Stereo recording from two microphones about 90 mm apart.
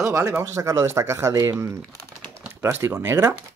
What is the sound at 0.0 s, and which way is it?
Speech, 30° right (ahead or behind).